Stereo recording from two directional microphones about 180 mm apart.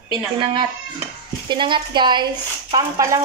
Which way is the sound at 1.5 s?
25° right (ahead or behind).